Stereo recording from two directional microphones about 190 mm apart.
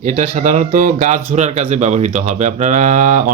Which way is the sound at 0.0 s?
40° right (ahead or behind).